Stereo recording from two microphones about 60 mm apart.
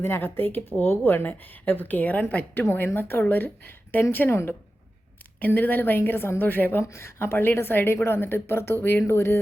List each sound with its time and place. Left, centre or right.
0.0 s speech: left
2.7 s speech: left
4.3 s speech: left
5.4 s speech: left
6.8 s speech: left